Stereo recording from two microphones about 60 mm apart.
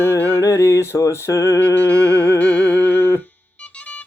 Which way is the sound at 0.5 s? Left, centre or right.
Left.